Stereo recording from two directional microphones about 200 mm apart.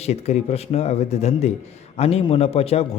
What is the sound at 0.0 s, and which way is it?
Speech, 30° left (ahead or behind).